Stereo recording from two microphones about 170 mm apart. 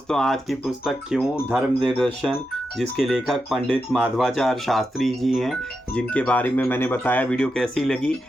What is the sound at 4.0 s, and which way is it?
Speech, 10° right (ahead or behind).